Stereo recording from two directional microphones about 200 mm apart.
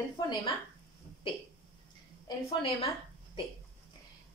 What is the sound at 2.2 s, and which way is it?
Speech, 25° left (ahead or behind).